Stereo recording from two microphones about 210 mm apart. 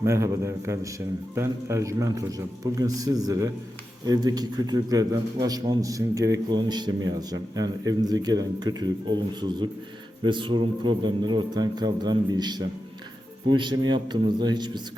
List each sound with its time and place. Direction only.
0.0 s a man's voice: 15° right (ahead or behind)